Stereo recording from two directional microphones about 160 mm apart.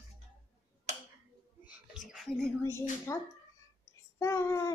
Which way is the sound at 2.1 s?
Centre (ahead or behind).